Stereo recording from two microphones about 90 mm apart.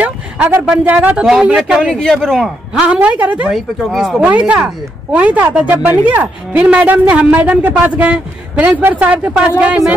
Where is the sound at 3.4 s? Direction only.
5° right (ahead or behind).